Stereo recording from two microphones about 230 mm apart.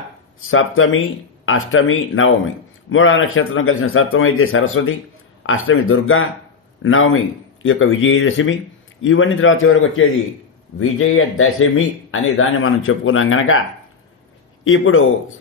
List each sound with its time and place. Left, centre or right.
0.4 s a man's voice: left
14.6 s a man's voice: left